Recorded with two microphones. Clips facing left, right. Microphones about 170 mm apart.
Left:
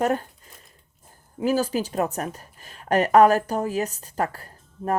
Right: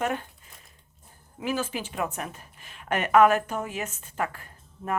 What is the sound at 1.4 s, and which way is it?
A woman's voice, 40° left (ahead or behind).